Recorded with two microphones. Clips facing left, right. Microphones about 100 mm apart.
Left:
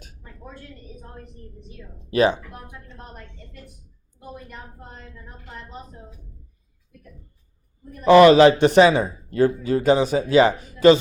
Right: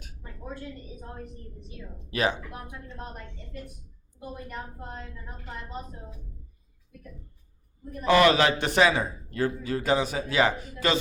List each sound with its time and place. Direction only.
0.9 s a woman's voice: 5° right (ahead or behind)
2.0 s speech: 30° left (ahead or behind)
4.4 s a woman's voice: 5° right (ahead or behind)
8.1 s a man's voice: 25° left (ahead or behind)